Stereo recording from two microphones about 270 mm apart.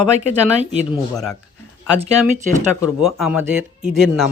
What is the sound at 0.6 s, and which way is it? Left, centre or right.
Speech, right.